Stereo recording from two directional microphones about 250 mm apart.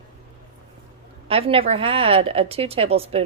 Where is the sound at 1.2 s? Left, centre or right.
Right.